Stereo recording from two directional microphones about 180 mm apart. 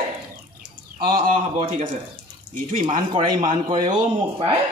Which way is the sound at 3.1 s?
25° right (ahead or behind).